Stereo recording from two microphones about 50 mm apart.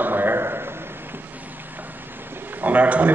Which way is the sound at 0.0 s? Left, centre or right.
Right.